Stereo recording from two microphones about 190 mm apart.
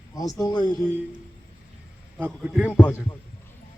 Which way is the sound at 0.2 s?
20° left (ahead or behind).